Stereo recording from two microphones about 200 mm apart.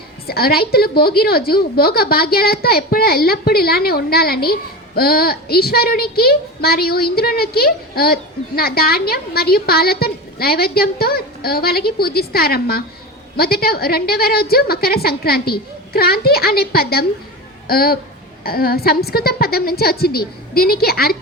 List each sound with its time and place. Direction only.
0.3 s a woman's voice: 50° left (ahead or behind)